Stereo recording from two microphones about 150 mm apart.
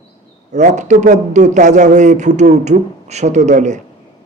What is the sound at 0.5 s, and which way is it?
A man's voice, 50° right (ahead or behind).